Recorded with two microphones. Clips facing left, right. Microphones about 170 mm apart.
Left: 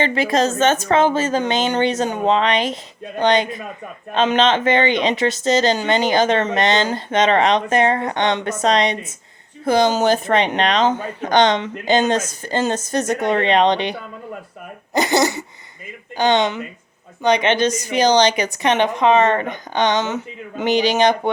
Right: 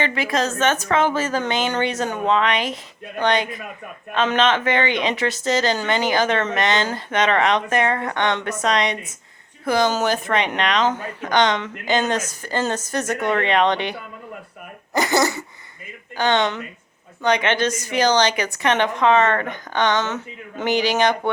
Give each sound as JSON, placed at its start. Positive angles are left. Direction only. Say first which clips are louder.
{"t": 0.0, "sound": "speech", "louder": "left 4 dB", "side_deg": 25}
{"t": 14.9, "sound": "a sound", "louder": "left 2 dB", "side_deg": 25}
{"t": 16.1, "sound": "a woman's voice", "louder": "left 3 dB", "side_deg": 15}